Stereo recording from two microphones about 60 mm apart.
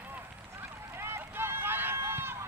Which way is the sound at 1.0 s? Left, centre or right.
Right.